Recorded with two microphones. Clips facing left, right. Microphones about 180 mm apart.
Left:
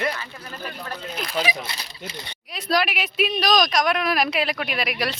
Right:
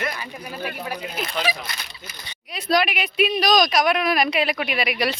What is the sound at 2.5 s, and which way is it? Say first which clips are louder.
Speech: right 2 dB; centre (ahead or behind).